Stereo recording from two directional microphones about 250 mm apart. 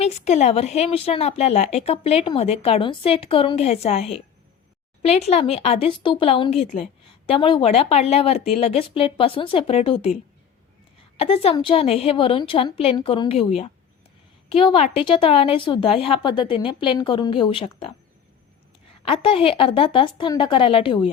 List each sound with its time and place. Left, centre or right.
0.0 s a woman's voice: left
11.2 s a woman's voice: left
19.0 s a woman's voice: left